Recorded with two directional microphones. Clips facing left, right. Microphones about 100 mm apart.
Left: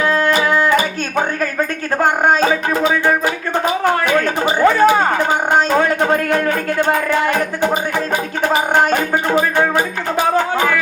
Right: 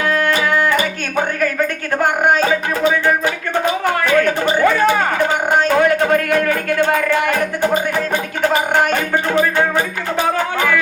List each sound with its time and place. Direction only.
0.1 s music: 25° left (ahead or behind)
4.6 s a man's voice: 25° left (ahead or behind)